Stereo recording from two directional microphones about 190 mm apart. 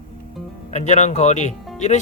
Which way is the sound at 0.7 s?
35° left (ahead or behind).